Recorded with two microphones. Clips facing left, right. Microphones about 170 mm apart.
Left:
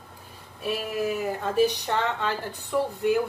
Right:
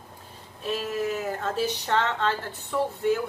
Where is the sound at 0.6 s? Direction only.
10° left (ahead or behind).